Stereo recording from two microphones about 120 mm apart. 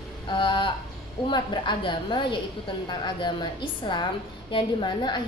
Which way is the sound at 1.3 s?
40° left (ahead or behind).